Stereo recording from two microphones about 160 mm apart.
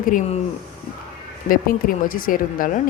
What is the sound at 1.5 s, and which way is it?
Speech, 60° left (ahead or behind).